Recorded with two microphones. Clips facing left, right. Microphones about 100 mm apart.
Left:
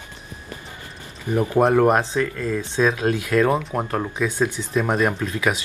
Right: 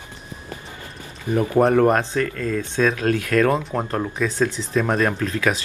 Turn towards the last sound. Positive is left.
turn(degrees=15)  # may be behind; listen again after turning